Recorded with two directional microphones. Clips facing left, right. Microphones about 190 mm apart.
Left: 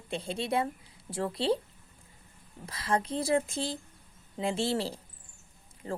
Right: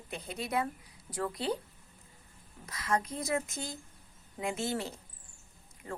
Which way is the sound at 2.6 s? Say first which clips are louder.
Left 2 dB; 30° left (ahead or behind).